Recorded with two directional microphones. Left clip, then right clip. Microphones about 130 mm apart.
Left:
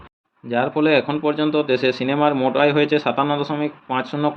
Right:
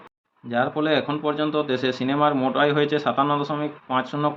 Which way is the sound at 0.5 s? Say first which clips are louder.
Left 4 dB; 35° left (ahead or behind).